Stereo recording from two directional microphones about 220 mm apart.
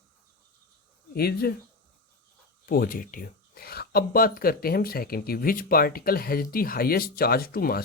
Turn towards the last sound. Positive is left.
turn(degrees=45)  # may be behind; listen again after turning